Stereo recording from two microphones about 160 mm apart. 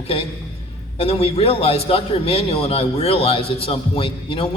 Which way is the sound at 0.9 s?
40° left (ahead or behind).